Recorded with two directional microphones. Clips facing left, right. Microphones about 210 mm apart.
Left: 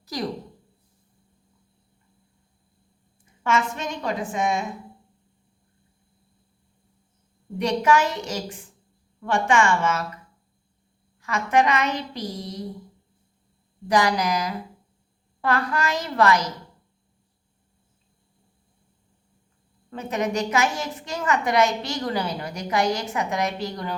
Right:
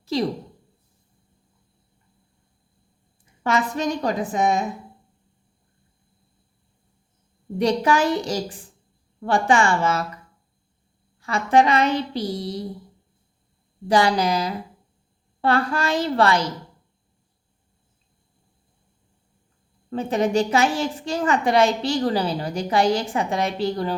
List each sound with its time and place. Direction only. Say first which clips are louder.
0.0 s a woman's voice: right 6 dB; 25° right (ahead or behind)
3.4 s a woman's voice: right 3 dB; 35° right (ahead or behind)
7.6 s a woman's voice: right 1 dB; 35° right (ahead or behind)
11.2 s a woman's voice: right 3 dB; 30° right (ahead or behind)
13.8 s a woman's voice: right 3 dB; 30° right (ahead or behind)
19.9 s a woman's voice: right 5 dB; 30° right (ahead or behind)